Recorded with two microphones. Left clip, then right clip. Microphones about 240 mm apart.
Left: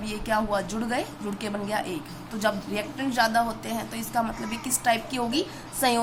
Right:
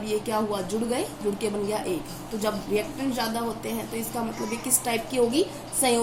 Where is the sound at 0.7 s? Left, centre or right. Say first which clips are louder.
Right 1 dB; left.